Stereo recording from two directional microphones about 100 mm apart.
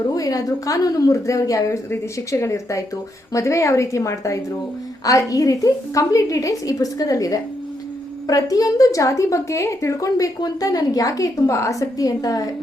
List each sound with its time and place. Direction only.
0.1 s a woman's voice: 35° left (ahead or behind)